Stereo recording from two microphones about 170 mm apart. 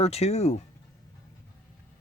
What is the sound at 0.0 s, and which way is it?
Speech, 35° left (ahead or behind).